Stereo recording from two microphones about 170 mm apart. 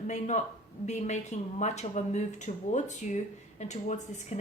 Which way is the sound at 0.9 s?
45° left (ahead or behind).